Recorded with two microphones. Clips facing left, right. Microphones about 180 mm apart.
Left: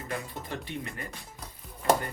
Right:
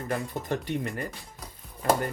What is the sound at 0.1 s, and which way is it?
Speech, 45° right (ahead or behind).